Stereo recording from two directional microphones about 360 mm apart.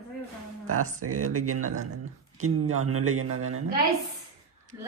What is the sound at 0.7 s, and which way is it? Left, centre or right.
Speech, right.